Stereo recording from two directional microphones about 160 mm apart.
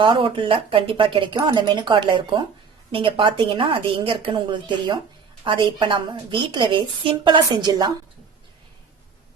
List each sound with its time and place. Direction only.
0.0 s a woman's voice: 30° right (ahead or behind)